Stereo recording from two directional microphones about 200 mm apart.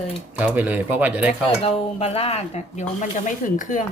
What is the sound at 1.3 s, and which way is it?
Speech, 30° left (ahead or behind).